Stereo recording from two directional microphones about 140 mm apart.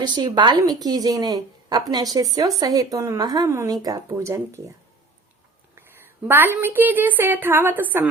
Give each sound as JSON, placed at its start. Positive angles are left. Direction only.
{"t": 0.0, "sound": "speech", "side_deg": -30}
{"t": 6.2, "sound": "a woman's voice", "side_deg": -15}